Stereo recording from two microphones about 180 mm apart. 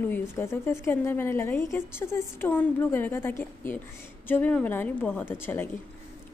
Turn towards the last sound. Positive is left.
turn(degrees=10)  # may be behind; listen again after turning